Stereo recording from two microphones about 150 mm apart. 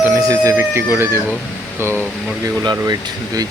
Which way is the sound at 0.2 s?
25° right (ahead or behind).